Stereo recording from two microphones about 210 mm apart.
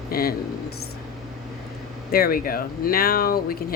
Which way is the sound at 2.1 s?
45° left (ahead or behind).